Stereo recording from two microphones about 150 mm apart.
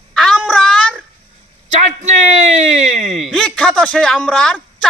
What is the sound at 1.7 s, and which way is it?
Speech, 50° right (ahead or behind).